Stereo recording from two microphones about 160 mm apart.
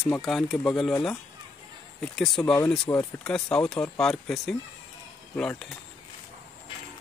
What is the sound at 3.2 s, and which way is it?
Speech, 5° left (ahead or behind).